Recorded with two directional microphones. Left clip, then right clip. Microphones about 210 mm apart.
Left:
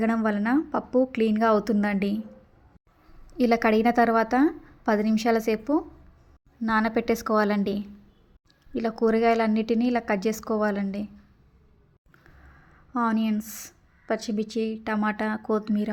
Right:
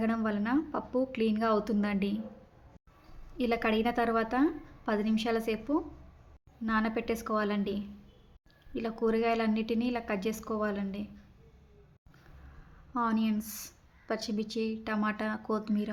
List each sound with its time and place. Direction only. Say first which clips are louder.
0.0 s a woman's voice: left 7 dB; 30° left (ahead or behind)
3.3 s a woman's voice: left 8 dB; 30° left (ahead or behind)
12.9 s a woman's voice: left 5 dB; 20° left (ahead or behind)